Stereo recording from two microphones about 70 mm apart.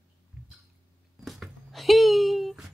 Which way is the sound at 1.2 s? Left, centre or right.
Centre.